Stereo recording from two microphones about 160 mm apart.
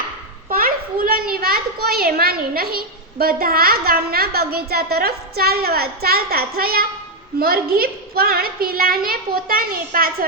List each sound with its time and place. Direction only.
0.5 s a child's voice: 65° right (ahead or behind)